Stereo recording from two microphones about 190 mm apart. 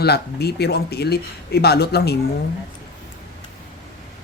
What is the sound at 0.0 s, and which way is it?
Speech, 60° left (ahead or behind).